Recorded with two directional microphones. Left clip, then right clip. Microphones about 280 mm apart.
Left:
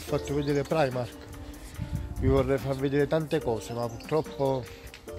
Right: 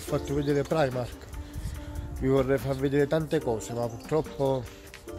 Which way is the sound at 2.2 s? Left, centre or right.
Centre.